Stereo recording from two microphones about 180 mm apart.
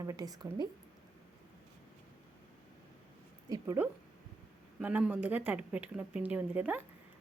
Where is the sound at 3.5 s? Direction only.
20° right (ahead or behind).